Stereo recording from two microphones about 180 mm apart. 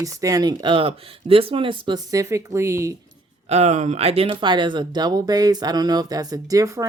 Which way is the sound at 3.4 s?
35° right (ahead or behind).